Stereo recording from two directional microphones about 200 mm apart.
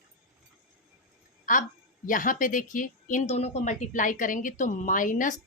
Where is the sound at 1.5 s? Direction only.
45° left (ahead or behind).